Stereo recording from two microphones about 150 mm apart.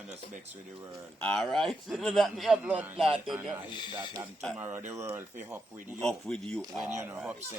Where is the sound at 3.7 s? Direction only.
30° left (ahead or behind).